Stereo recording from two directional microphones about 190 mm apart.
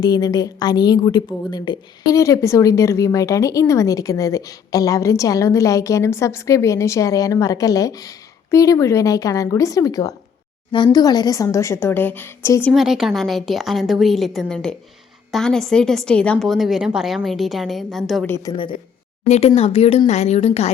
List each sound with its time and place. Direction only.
0.0 s a woman's voice: 20° left (ahead or behind)
12.7 s a woman's voice: centre (ahead or behind)
18.5 s speech: 20° left (ahead or behind)
19.3 s a woman's voice: 30° left (ahead or behind)